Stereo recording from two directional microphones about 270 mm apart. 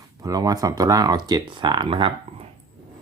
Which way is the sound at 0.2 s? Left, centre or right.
Centre.